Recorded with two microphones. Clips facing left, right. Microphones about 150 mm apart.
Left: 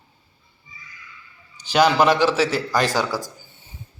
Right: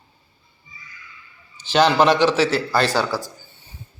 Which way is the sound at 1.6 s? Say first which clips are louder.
Right 1 dB; 10° left (ahead or behind).